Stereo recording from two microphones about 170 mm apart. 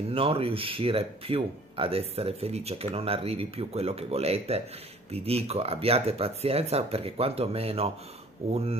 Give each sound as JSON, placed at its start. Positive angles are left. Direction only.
{"t": 0.1, "sound": "speech", "side_deg": -35}